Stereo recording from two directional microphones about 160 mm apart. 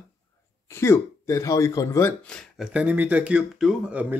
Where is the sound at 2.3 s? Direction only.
Centre (ahead or behind).